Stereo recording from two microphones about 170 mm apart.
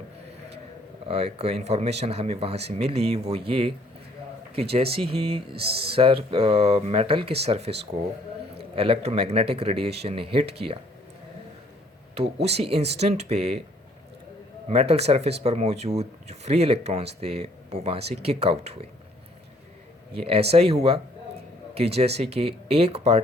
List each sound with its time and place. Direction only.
1.0 s speech: 35° right (ahead or behind)
4.7 s speech: 35° right (ahead or behind)
5.6 s speech: 70° right (ahead or behind)
5.9 s a man's voice: 35° right (ahead or behind)
12.1 s speech: 40° right (ahead or behind)
14.7 s speech: 35° right (ahead or behind)
20.1 s speech: 35° right (ahead or behind)